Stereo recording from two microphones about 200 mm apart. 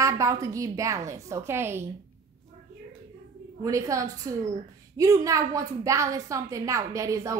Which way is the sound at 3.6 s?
15° right (ahead or behind).